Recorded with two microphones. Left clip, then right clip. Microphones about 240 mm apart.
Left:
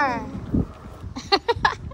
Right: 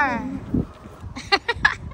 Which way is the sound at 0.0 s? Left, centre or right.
Centre.